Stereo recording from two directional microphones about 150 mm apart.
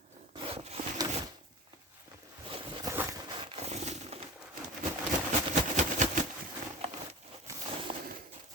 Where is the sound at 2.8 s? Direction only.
20° right (ahead or behind); by 4.1 s 50° right (ahead or behind).